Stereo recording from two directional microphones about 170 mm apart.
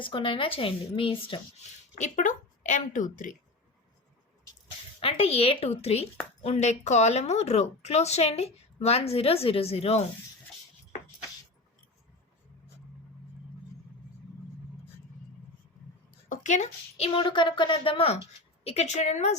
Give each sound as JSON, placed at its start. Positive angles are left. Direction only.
{"t": 0.0, "sound": "speech", "side_deg": 30}
{"t": 4.9, "sound": "speech", "side_deg": 35}
{"t": 16.3, "sound": "a woman's voice", "side_deg": 45}
{"t": 17.2, "sound": "speech", "side_deg": 30}